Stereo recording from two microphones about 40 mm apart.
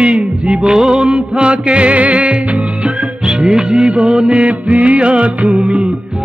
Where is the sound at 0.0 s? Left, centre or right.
Right.